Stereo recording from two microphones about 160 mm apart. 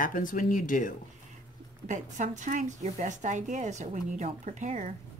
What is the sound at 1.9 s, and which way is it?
Speech, 50° right (ahead or behind).